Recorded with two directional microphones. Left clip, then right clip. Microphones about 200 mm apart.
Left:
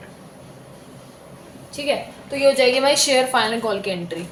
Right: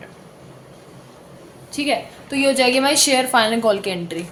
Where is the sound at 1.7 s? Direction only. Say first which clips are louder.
Right 2 dB; 50° right (ahead or behind); by 4.1 s 35° right (ahead or behind).